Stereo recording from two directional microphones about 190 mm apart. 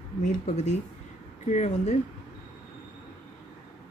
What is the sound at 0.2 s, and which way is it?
Speech, 40° left (ahead or behind).